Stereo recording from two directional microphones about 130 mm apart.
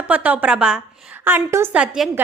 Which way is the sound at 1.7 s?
5° right (ahead or behind).